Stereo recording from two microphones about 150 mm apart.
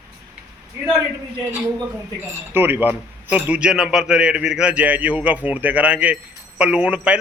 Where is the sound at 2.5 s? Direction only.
15° right (ahead or behind).